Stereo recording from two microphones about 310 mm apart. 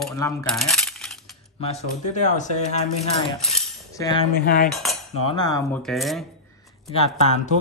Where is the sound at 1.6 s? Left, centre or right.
Left.